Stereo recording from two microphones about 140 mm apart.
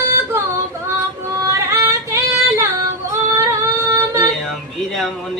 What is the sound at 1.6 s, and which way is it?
Female singing, 20° right (ahead or behind).